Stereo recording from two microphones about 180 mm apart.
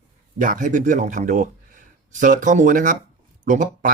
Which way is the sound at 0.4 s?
45° right (ahead or behind).